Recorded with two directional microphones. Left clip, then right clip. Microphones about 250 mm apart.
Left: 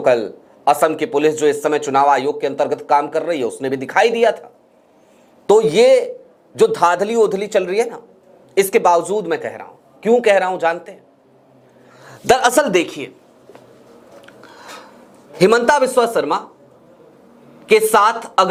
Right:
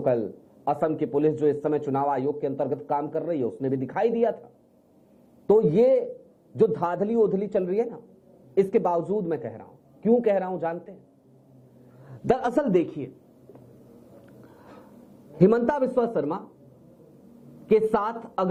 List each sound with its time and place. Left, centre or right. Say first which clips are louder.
0.0 s a man's voice: left 10 dB; centre
5.5 s a man's voice: left 9 dB; centre
9.0 s speech: left 8 dB; left
9.2 s speech: left 9 dB; centre
12.0 s a sound: left 11 dB; centre
17.7 s speech: left 10 dB; centre